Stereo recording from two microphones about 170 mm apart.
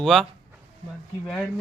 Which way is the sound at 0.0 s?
Centre (ahead or behind).